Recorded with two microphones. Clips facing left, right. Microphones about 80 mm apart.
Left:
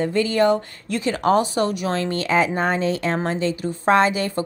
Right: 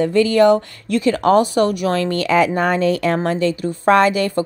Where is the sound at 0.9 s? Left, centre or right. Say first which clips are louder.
Right 5 dB; right.